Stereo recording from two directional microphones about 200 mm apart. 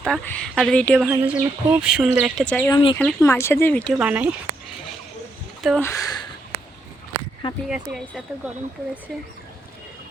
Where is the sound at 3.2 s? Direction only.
15° left (ahead or behind).